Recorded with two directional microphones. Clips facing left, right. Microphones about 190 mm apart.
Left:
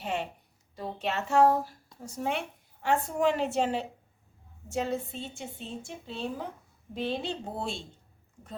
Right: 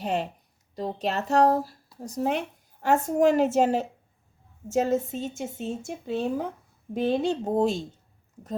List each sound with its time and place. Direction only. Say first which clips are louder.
0.0 s a woman's voice: right 5 dB; 40° right (ahead or behind)